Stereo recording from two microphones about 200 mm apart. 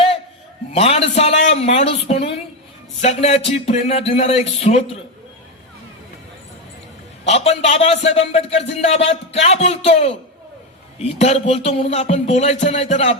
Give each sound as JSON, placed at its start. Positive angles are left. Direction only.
{"t": 0.7, "sound": "speech", "side_deg": 30}
{"t": 7.3, "sound": "speech", "side_deg": 35}